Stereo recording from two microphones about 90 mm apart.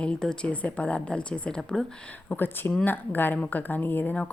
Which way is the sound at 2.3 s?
20° left (ahead or behind).